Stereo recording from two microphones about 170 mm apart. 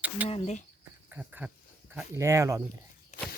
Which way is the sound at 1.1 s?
10° right (ahead or behind).